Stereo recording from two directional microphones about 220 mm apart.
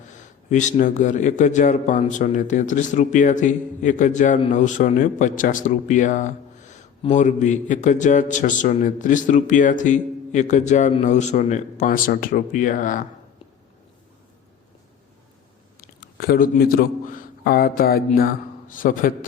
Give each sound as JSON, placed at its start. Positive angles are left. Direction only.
{"t": 0.1, "sound": "a man's voice", "side_deg": 35}
{"t": 15.8, "sound": "speech", "side_deg": 45}